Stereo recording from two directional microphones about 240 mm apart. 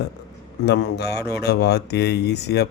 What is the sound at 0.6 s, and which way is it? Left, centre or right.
A man's voice, left.